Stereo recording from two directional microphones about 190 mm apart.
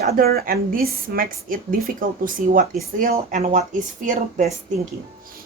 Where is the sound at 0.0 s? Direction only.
55° right (ahead or behind).